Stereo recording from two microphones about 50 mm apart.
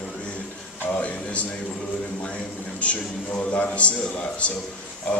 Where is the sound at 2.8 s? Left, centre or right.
Left.